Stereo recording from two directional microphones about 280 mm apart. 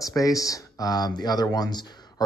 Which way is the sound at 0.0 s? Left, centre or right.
Centre.